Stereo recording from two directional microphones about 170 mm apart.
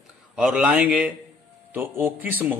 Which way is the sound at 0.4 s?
5° right (ahead or behind).